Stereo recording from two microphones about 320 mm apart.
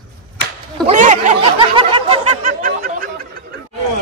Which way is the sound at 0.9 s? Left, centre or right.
Right.